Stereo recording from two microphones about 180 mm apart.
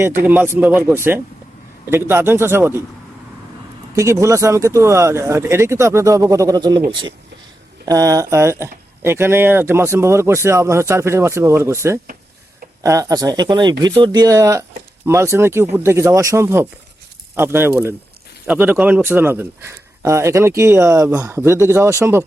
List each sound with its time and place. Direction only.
0.0 s speech: 10° right (ahead or behind)
3.9 s speech: 15° right (ahead or behind)
7.9 s speech: 20° right (ahead or behind)